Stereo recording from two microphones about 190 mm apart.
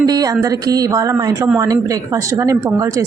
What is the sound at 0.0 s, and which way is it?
A woman's voice, 20° right (ahead or behind).